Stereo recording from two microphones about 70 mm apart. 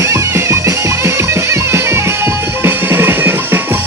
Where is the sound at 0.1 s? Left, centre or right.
Right.